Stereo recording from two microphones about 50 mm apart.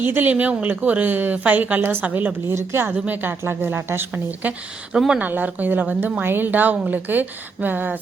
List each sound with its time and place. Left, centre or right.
0.0 s speech: right
2.5 s speech: right
2.9 s speech: right
3.4 s speech: right
4.1 s speech: right
4.9 s speech: centre
5.2 s speech: right